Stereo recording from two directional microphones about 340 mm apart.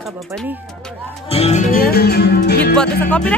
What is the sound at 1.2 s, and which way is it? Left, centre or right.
Music, centre.